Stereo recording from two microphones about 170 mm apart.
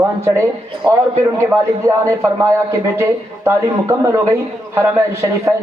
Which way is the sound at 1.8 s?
20° right (ahead or behind).